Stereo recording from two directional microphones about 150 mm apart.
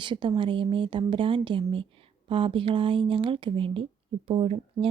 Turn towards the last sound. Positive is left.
turn(degrees=-40)  # may be behind; listen again after turning